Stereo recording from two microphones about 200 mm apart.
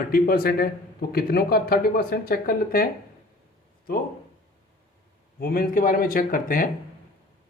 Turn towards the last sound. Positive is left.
turn(degrees=45)  # may be behind; listen again after turning